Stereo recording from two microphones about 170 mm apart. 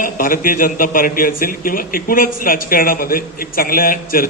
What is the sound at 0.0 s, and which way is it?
Speech, 55° left (ahead or behind).